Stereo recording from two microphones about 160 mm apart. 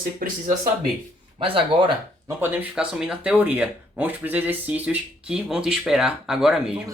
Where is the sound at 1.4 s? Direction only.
35° right (ahead or behind).